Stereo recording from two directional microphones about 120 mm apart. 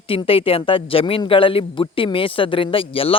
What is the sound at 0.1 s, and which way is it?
Speech, 50° left (ahead or behind).